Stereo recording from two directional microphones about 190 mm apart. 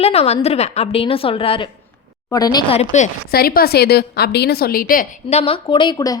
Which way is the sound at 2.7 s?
35° left (ahead or behind).